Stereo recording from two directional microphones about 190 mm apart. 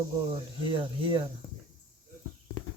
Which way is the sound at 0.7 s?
25° right (ahead or behind).